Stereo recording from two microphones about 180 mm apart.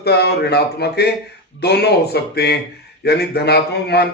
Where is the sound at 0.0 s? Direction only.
65° left (ahead or behind).